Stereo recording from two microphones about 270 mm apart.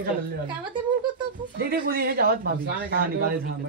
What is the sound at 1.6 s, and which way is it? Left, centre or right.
Speech, right.